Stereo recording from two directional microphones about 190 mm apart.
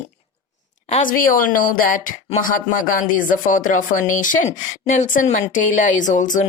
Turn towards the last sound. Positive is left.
turn(degrees=40)  # may be behind; listen again after turning